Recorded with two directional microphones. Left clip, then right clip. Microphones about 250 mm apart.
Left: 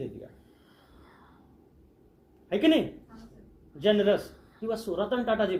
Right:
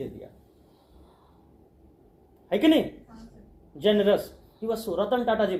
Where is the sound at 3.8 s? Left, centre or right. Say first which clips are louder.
Right 2 dB; centre.